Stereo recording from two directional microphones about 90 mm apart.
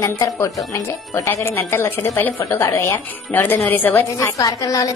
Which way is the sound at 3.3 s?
20° left (ahead or behind).